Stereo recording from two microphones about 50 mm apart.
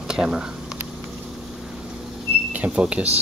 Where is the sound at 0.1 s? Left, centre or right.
Centre.